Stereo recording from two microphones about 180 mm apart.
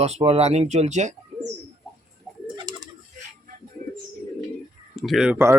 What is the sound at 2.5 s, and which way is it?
Bird, 25° right (ahead or behind).